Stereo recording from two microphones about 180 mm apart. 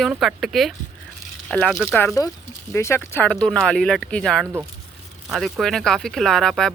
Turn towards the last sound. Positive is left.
turn(degrees=5)  # may be behind; listen again after turning